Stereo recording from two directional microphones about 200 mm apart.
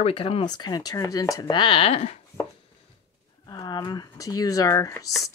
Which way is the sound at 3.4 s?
20° left (ahead or behind).